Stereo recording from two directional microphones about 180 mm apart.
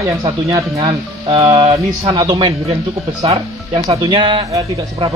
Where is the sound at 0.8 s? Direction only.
30° right (ahead or behind).